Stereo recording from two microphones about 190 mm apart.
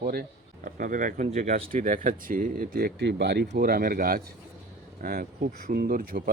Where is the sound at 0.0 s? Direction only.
50° right (ahead or behind).